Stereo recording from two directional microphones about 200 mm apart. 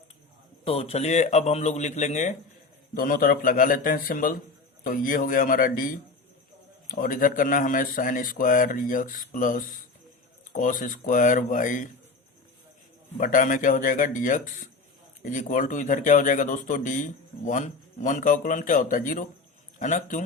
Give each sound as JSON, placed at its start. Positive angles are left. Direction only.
{"t": 0.6, "sound": "a man's voice", "side_deg": 30}
{"t": 13.1, "sound": "speech", "side_deg": 40}